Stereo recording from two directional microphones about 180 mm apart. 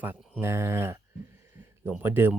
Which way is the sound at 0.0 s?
10° right (ahead or behind).